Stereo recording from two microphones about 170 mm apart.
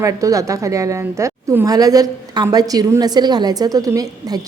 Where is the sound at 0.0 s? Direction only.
20° right (ahead or behind).